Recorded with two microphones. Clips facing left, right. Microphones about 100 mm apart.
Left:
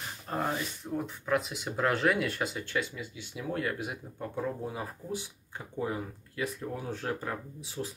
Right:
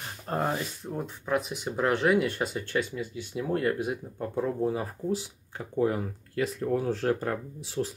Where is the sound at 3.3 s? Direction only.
40° right (ahead or behind).